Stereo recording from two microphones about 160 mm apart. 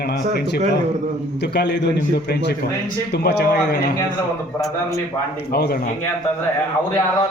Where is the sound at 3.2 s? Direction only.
90° left.